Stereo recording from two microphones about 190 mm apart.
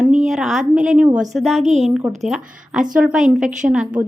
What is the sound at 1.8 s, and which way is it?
A woman's voice, 5° right (ahead or behind).